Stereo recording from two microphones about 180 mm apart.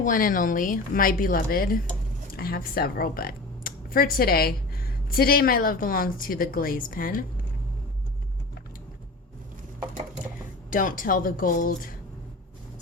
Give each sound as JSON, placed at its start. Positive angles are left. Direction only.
{"t": 0.0, "sound": "a woman's voice", "side_deg": 50}
{"t": 10.7, "sound": "a woman's voice", "side_deg": 50}